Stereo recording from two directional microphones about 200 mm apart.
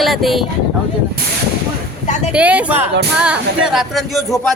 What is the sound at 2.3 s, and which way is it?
Speech, 5° right (ahead or behind).